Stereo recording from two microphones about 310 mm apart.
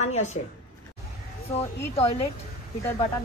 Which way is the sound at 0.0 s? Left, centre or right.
Left.